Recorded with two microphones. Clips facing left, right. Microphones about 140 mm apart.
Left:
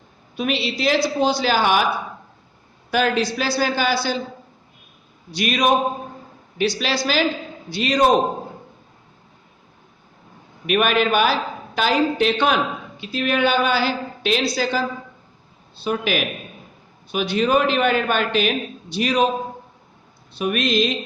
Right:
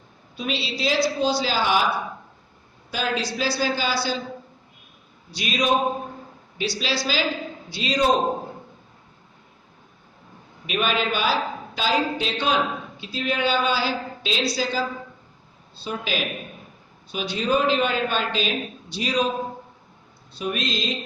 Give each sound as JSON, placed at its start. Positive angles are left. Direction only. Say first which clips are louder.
{"t": 0.3, "sound": "a woman's voice", "louder": "left 5 dB", "side_deg": 60}
{"t": 2.9, "sound": "a woman's voice", "louder": "left 6 dB", "side_deg": 55}
{"t": 5.3, "sound": "a woman's voice", "louder": "left 4 dB", "side_deg": 55}
{"t": 10.7, "sound": "a woman's voice", "louder": "left 6 dB", "side_deg": 60}
{"t": 20.4, "sound": "a woman's voice", "louder": "left 7 dB", "side_deg": 65}